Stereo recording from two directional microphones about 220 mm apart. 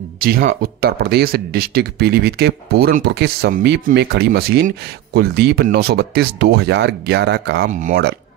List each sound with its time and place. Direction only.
0.2 s speech: 40° right (ahead or behind)